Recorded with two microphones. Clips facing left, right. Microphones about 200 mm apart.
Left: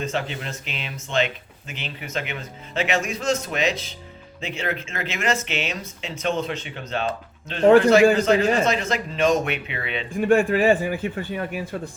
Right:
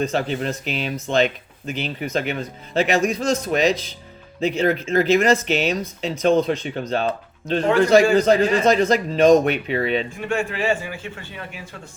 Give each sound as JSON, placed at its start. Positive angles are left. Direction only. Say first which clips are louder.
{"t": 0.0, "sound": "speech", "louder": "right 6 dB", "side_deg": -40}
{"t": 10.2, "sound": "a man's voice", "louder": "left 8 dB", "side_deg": 50}